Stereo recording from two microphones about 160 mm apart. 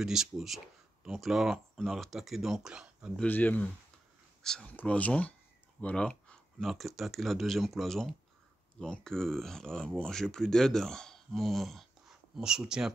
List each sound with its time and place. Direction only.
0.0 s speech: 5° right (ahead or behind)
3.2 s speech: 10° left (ahead or behind)